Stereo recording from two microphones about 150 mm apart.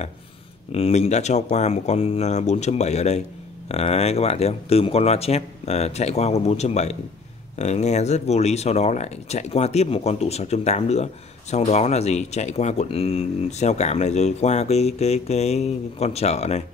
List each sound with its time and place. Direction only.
0.7 s speech: 40° left (ahead or behind)